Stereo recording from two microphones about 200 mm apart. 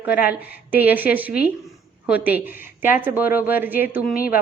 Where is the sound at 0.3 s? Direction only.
10° right (ahead or behind).